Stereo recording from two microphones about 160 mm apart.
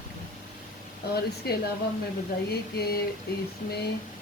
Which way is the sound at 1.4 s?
75° left (ahead or behind).